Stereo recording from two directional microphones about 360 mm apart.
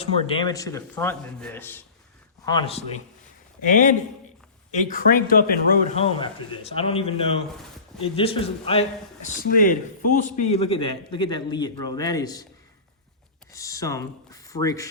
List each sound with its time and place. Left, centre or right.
0.0 s speech: centre
13.5 s speech: centre